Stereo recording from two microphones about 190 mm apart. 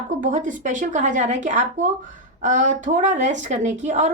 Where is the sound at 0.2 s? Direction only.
40° right (ahead or behind).